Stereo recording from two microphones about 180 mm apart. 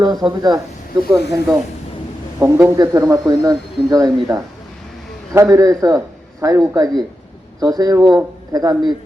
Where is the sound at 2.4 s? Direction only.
15° right (ahead or behind).